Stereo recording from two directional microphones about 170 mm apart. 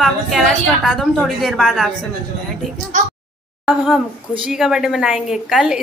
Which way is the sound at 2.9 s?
45° right (ahead or behind).